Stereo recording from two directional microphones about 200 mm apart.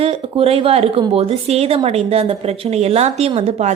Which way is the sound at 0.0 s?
30° right (ahead or behind).